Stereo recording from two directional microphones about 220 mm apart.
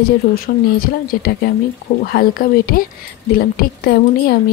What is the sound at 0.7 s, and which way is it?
Speech, 40° left (ahead or behind).